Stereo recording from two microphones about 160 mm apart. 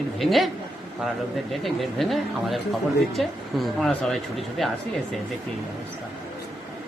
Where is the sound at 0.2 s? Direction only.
Centre (ahead or behind).